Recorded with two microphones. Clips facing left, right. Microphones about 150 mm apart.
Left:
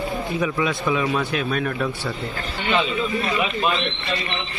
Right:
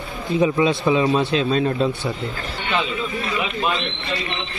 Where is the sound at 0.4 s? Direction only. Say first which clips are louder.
Right 7 dB; 25° right (ahead or behind).